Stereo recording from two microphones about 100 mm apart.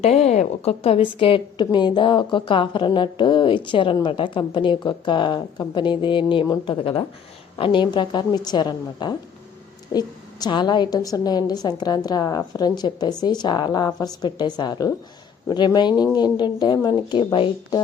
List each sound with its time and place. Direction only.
0.0 s a woman's voice: 90° left
1.2 s a woman's voice: 55° left (ahead or behind)